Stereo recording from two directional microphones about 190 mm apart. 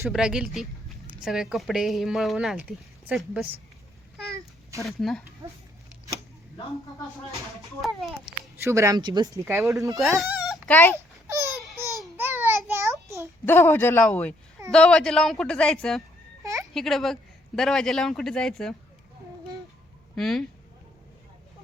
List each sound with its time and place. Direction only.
0.1 s a man's voice: 5° right (ahead or behind)
4.8 s a man's voice: centre (ahead or behind)
7.8 s a man's voice: centre (ahead or behind)
8.2 s speech: 15° right (ahead or behind)
10.0 s goat: centre (ahead or behind)
10.7 s a man's voice: 10° left (ahead or behind)
10.9 s babbling: 15° right (ahead or behind)
13.4 s a man's voice: 10° left (ahead or behind)
16.4 s a sound: 15° right (ahead or behind)
16.7 s a man's voice: centre (ahead or behind)
20.1 s a man's voice: centre (ahead or behind)